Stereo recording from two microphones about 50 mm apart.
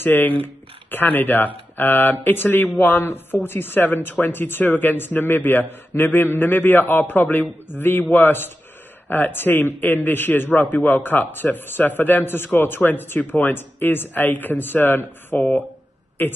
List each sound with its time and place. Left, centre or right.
0.0 s a man's voice: left